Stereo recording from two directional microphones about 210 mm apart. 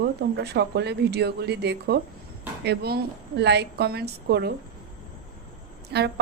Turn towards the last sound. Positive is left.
turn(degrees=-50)  # may be behind; listen again after turning